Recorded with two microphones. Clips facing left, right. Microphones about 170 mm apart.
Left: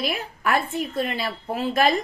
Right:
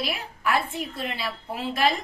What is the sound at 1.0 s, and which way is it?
Speech, 45° left (ahead or behind).